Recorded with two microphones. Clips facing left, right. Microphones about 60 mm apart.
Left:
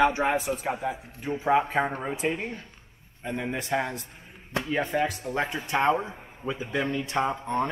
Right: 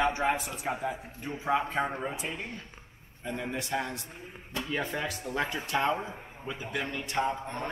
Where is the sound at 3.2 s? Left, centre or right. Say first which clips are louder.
Left 3 dB; centre.